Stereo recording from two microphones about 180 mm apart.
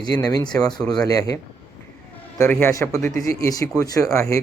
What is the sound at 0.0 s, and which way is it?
Speech, 20° left (ahead or behind).